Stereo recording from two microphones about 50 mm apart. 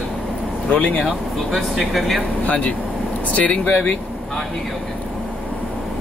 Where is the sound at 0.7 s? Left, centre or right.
Left.